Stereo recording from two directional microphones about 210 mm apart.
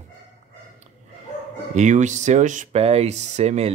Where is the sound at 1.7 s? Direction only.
35° right (ahead or behind).